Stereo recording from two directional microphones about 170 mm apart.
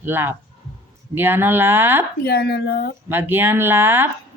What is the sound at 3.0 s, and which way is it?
Speech, 10° right (ahead or behind).